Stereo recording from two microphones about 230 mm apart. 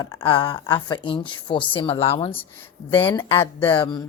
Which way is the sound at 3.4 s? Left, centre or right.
Centre.